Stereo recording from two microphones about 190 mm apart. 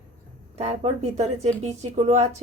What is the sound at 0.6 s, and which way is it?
Speech, 35° right (ahead or behind).